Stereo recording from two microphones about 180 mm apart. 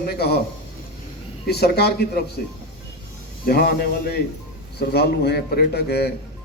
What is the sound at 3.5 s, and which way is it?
A man's voice, 60° left (ahead or behind).